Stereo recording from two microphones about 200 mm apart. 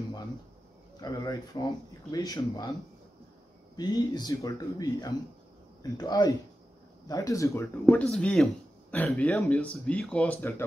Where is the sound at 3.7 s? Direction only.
20° left (ahead or behind).